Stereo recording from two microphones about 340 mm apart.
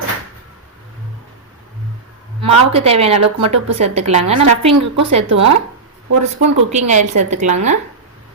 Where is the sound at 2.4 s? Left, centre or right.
Centre.